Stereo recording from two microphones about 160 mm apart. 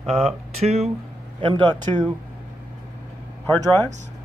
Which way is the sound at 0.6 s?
40° right (ahead or behind).